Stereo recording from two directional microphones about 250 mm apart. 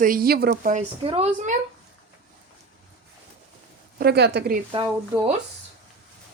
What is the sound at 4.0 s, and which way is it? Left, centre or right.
Speech, right.